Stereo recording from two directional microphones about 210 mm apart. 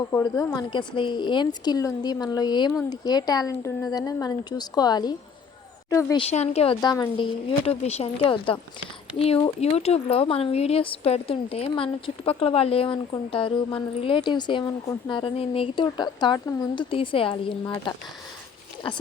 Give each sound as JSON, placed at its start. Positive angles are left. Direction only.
{"t": 0.1, "sound": "speech", "side_deg": 15}
{"t": 6.2, "sound": "speech", "side_deg": 30}